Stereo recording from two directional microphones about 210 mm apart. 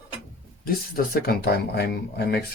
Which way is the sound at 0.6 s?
45° left (ahead or behind).